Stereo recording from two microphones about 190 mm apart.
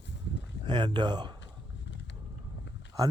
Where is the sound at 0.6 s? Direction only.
25° right (ahead or behind).